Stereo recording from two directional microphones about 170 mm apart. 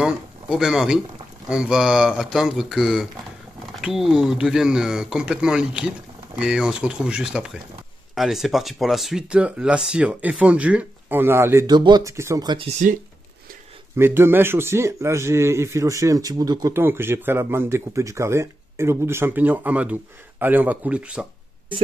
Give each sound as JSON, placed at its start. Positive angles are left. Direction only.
{"t": 0.0, "sound": "speech", "side_deg": -5}
{"t": 11.7, "sound": "speech", "side_deg": -25}
{"t": 13.9, "sound": "speech", "side_deg": -15}